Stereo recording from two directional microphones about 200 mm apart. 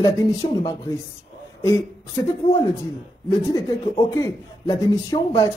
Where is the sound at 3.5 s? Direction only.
20° left (ahead or behind).